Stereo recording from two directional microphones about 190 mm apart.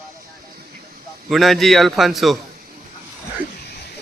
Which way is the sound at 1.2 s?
Centre (ahead or behind).